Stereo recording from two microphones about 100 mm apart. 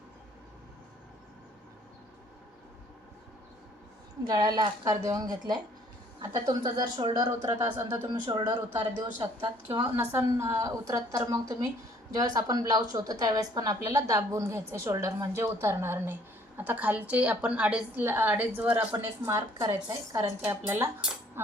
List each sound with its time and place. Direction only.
4.3 s a woman's voice: 40° right (ahead or behind)
10.1 s a woman's voice: 30° right (ahead or behind); by 18.0 s 10° right (ahead or behind)
18.0 s a woman's voice: 20° right (ahead or behind)
18.9 s a woman's voice: 30° right (ahead or behind)
19.5 s a woman's voice: 45° right (ahead or behind); by 20.9 s 25° right (ahead or behind)
21.4 s music: 25° right (ahead or behind)